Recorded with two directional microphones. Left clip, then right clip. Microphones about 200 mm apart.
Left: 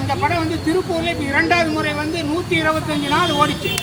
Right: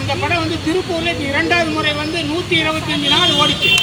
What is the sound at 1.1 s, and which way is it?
Speech, 15° left (ahead or behind).